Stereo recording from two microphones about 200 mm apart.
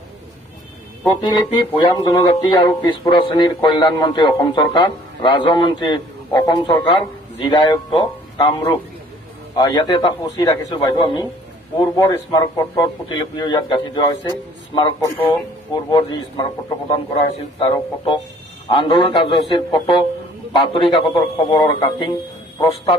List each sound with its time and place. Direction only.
1.0 s speech: 20° left (ahead or behind)
9.6 s speech: 20° left (ahead or behind)
15.2 s speech: 25° left (ahead or behind)